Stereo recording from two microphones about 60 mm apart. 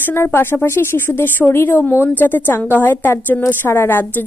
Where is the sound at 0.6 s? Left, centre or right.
Left.